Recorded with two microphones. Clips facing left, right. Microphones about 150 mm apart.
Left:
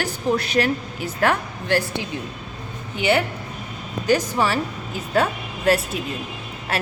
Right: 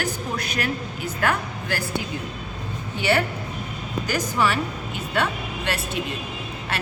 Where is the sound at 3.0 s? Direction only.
20° left (ahead or behind).